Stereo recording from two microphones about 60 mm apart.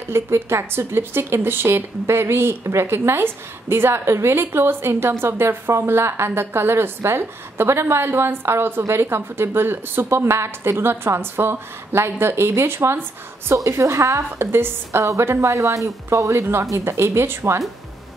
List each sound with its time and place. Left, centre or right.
0.1 s a woman's voice: right
13.7 s a woman's voice: right
14.4 s a woman's voice: right
16.7 s a woman's voice: right